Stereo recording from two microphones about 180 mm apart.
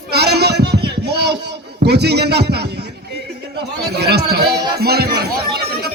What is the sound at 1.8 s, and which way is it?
Music, 65° right (ahead or behind).